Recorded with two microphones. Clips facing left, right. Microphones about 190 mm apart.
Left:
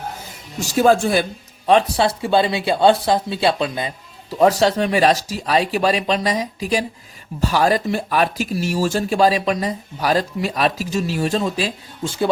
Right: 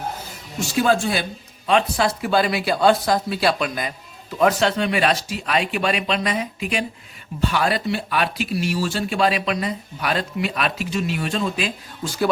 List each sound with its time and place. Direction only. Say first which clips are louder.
0.6 s speech: left 4 dB; 40° left (ahead or behind)
1.6 s speech: left 4 dB; 35° left (ahead or behind)